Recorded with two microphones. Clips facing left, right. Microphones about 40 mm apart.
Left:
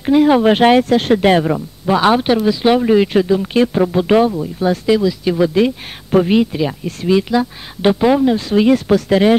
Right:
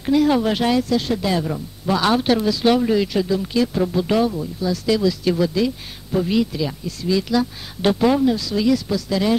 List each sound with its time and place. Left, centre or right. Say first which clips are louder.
0.0 s a woman's voice: left 6 dB; left
1.9 s speech: left 5 dB; left
4.8 s speech: left 2 dB; left
5.4 s speech: left 6 dB; left
7.2 s speech: left 4 dB; left
8.3 s speech: left 6 dB; left